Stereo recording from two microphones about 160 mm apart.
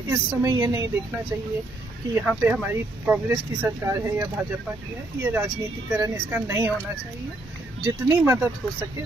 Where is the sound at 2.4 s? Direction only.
10° right (ahead or behind).